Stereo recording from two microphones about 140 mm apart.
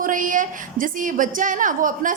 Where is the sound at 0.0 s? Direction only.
70° right (ahead or behind).